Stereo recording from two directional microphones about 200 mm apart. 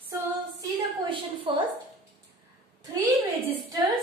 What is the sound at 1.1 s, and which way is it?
Speech, 25° right (ahead or behind).